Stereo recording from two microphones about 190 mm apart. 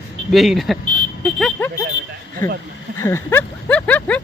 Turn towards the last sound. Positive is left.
turn(degrees=10)  # may be behind; listen again after turning